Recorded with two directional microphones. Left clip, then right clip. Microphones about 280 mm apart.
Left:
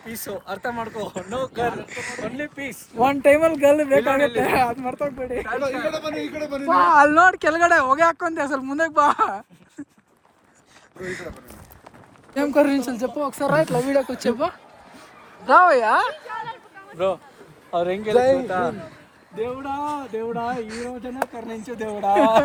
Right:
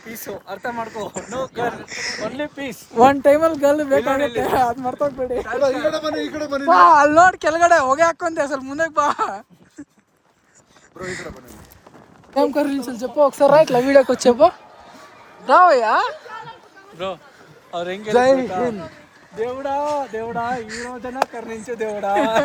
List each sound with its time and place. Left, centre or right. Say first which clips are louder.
0.0 s speech: even; centre
2.3 s speech: right 3 dB; centre
5.9 s a man's voice: right 4 dB; right
6.9 s speech: right 2 dB; centre
9.8 s a sound: left 1 dB; centre
11.0 s speech: right 2 dB; centre
12.4 s speech: even; centre
13.1 s a man's voice: right 9 dB; centre; by 14.2 s right
14.2 s speech: right 10 dB; centre
15.4 s speech: right 2 dB; centre
17.0 s speech: left 5 dB; left
18.1 s speech: right 3 dB; right
19.4 s speech: right 4 dB; centre
20.7 s speech: right 2 dB; centre